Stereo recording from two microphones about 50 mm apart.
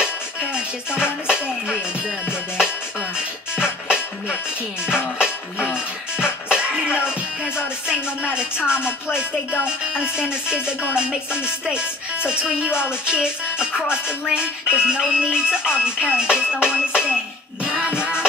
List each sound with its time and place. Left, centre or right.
0.9 s speech: centre
3.5 s music: centre
8.6 s speech: centre
9.7 s music: centre
11.0 s speech: centre
15.1 s music: centre